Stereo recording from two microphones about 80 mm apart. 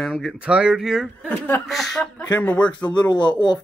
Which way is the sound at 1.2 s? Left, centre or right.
Centre.